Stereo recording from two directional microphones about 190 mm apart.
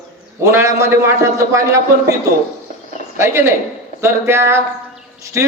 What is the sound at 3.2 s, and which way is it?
Speech, 15° right (ahead or behind).